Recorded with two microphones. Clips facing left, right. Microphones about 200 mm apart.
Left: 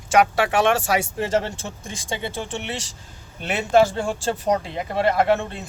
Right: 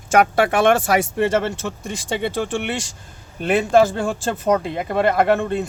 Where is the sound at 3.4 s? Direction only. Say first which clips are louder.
Right 3 dB; 50° right (ahead or behind).